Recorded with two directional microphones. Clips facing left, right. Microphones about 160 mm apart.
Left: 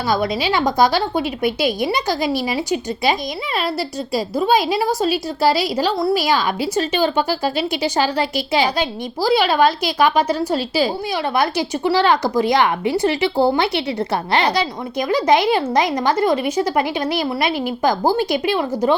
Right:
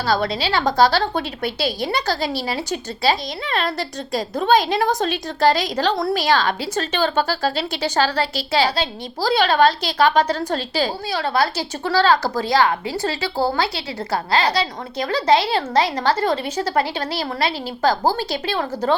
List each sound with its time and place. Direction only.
0.1 s a woman's voice: 15° left (ahead or behind)